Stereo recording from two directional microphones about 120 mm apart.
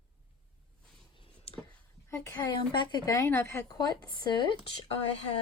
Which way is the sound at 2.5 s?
40° left (ahead or behind).